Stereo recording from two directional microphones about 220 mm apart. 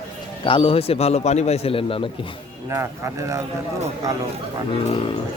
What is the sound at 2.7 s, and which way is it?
Speech, 15° right (ahead or behind).